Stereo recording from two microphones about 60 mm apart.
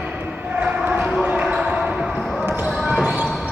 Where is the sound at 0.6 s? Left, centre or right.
Right.